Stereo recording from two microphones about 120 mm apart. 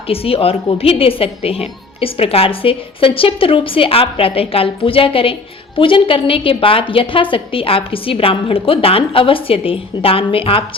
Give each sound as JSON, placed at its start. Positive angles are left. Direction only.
{"t": 0.1, "sound": "a woman's voice", "side_deg": 55}